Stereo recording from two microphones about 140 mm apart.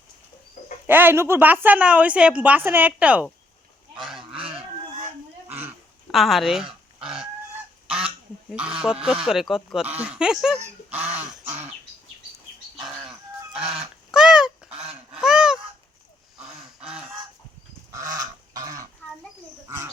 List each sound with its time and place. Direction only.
0.9 s a woman's voice: 15° right (ahead or behind)
6.1 s speech: centre (ahead or behind)
7.0 s fowl: 5° right (ahead or behind)
7.9 s goose: 5° right (ahead or behind)
8.5 s a woman's voice: 5° right (ahead or behind)
10.9 s duck: 10° right (ahead or behind)
13.5 s goose: 5° right (ahead or behind)
15.2 s honk: 5° right (ahead or behind)
18.0 s goose: 25° right (ahead or behind)
19.6 s bird: 20° right (ahead or behind)